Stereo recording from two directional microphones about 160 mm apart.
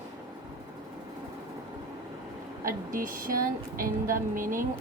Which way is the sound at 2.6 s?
60° right (ahead or behind).